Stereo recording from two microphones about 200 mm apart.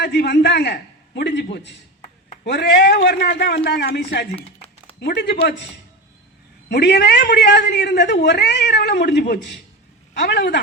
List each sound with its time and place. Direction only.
0.0 s a man's voice: 60° left (ahead or behind)
4.4 s a sound: 30° left (ahead or behind)
4.9 s speech: 60° left (ahead or behind)
6.7 s a man's voice: 55° left (ahead or behind)